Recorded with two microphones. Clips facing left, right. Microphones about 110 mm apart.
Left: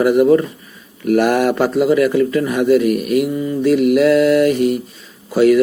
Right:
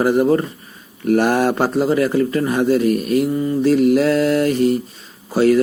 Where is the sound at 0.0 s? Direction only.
30° right (ahead or behind).